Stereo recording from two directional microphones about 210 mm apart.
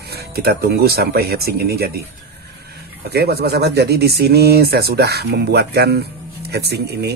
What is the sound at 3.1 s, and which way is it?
Speech, 50° right (ahead or behind).